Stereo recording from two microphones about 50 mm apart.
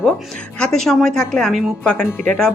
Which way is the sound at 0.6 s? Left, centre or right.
Centre.